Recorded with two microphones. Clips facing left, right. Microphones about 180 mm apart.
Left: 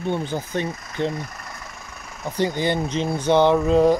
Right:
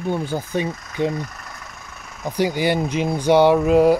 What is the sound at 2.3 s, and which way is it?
Speech, 10° right (ahead or behind).